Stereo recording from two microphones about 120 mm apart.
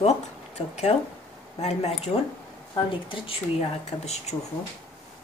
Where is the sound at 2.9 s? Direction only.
50° left (ahead or behind); by 4.3 s 65° left (ahead or behind).